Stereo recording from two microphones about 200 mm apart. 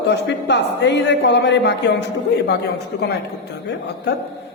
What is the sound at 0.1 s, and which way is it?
A man's voice, 60° left (ahead or behind).